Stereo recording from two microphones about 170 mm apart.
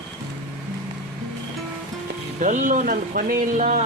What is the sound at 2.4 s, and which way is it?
Speech, 50° right (ahead or behind).